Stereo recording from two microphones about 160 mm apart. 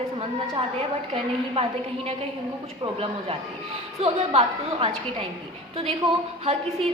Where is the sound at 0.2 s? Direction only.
35° right (ahead or behind).